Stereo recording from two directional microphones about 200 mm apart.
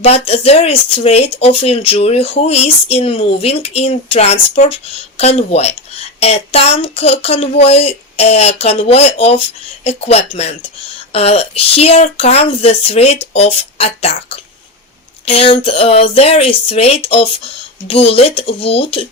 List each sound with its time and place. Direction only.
0.0 s speech: 30° left (ahead or behind)